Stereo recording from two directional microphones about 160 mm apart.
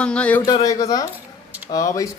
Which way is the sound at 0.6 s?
20° left (ahead or behind).